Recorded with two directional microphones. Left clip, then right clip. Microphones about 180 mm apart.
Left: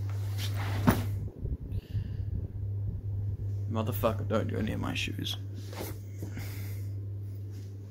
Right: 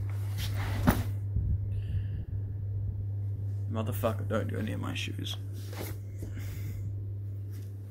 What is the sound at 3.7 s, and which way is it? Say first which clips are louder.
Speech: left 2 dB; 20° left (ahead or behind).